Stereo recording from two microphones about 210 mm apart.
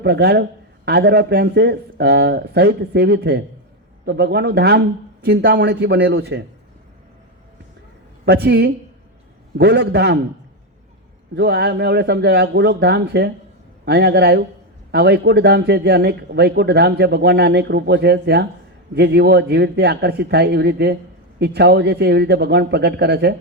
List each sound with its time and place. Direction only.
0.0 s speech: 50° right (ahead or behind)
8.2 s speech: 55° right (ahead or behind)
11.3 s speech: 55° right (ahead or behind)